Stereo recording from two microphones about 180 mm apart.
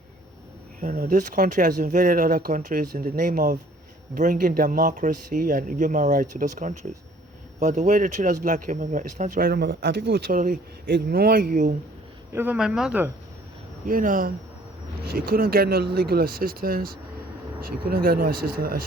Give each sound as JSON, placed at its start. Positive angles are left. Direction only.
{"t": 0.8, "sound": "speech", "side_deg": -50}
{"t": 9.5, "sound": "speech", "side_deg": -65}
{"t": 10.3, "sound": "speech", "side_deg": -50}
{"t": 12.3, "sound": "speech", "side_deg": -10}
{"t": 13.8, "sound": "speech", "side_deg": -50}